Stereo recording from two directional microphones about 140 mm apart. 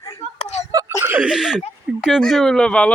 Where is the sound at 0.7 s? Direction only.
25° right (ahead or behind).